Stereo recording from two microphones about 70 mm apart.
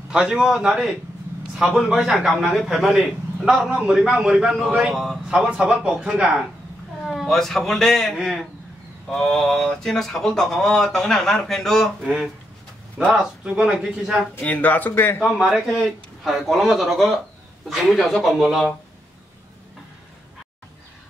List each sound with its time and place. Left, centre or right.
0.1 s a man's voice: centre
5.3 s a man's voice: centre
7.1 s a man's voice: centre
9.1 s speech: centre
12.0 s a man's voice: centre
13.4 s a man's voice: centre
14.4 s speech: left
15.2 s speech: centre